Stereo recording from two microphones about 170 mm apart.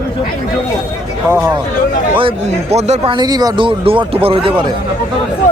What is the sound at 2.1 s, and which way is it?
Speech, 35° right (ahead or behind).